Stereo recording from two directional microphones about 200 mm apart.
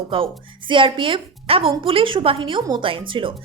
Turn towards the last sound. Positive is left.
turn(degrees=-25)  # may be behind; listen again after turning